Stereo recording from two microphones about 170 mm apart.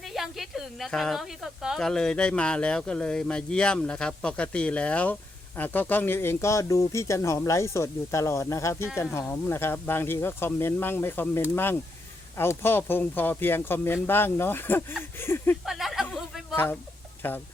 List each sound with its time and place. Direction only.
0.0 s speech: centre (ahead or behind)
15.6 s a sound: centre (ahead or behind)
17.2 s speech: 10° left (ahead or behind)